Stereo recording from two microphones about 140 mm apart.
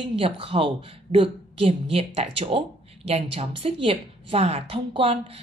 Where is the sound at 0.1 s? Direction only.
40° right (ahead or behind).